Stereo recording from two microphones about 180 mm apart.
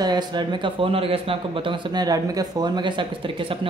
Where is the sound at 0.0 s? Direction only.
25° right (ahead or behind).